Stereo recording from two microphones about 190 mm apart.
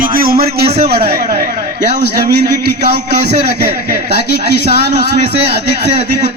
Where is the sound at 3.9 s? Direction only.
60° right (ahead or behind).